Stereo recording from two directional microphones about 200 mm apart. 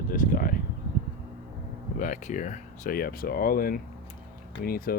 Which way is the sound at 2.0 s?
40° left (ahead or behind).